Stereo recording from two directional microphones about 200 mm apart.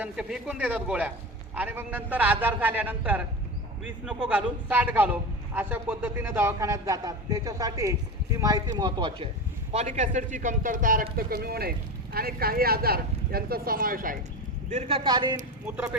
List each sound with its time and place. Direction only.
0.0 s a man's voice: 5° right (ahead or behind); by 9.3 s 25° right (ahead or behind)
9.7 s speech: 35° right (ahead or behind)
14.7 s a man's voice: 30° right (ahead or behind)
15.6 s speech: 5° right (ahead or behind)